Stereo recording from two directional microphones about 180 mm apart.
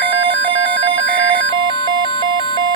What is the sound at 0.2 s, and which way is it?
Telephone, 85° right.